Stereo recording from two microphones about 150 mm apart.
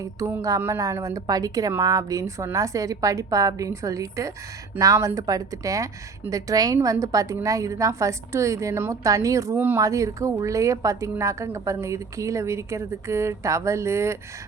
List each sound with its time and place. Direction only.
0.0 s a woman's voice: 20° right (ahead or behind)